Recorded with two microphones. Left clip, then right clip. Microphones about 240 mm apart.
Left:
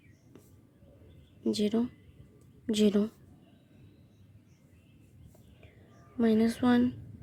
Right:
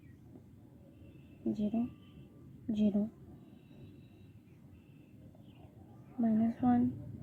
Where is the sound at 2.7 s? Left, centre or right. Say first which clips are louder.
Left 8 dB; left.